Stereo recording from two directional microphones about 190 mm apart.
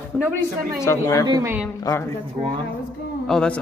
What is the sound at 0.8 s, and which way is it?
Speech, 20° left (ahead or behind).